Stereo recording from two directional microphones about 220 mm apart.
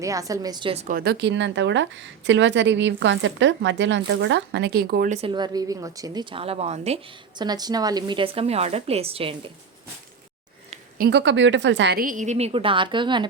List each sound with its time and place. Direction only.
0.0 s a woman's voice: 15° right (ahead or behind)
0.9 s a woman's voice: 50° right (ahead or behind); by 9.5 s 25° right (ahead or behind)
10.7 s a woman's voice: 40° right (ahead or behind); by 13.2 s 20° right (ahead or behind)